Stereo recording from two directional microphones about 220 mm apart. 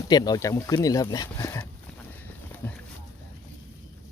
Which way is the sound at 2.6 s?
10° left (ahead or behind).